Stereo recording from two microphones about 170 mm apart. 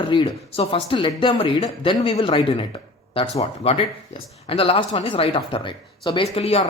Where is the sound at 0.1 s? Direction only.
30° left (ahead or behind).